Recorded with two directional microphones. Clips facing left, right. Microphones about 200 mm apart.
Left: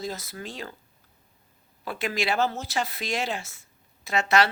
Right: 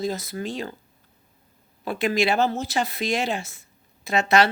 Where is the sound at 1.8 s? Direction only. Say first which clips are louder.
Right 6 dB; 20° right (ahead or behind).